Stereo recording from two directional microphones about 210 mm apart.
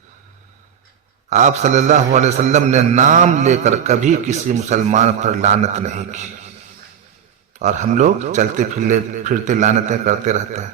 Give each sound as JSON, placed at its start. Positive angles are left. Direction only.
{"t": 1.3, "sound": "a man's voice", "side_deg": -35}
{"t": 7.6, "sound": "a man's voice", "side_deg": -35}